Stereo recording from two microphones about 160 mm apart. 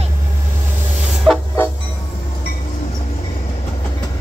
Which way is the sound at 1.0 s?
Centre (ahead or behind).